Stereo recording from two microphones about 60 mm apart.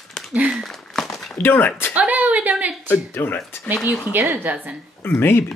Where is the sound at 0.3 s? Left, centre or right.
Right.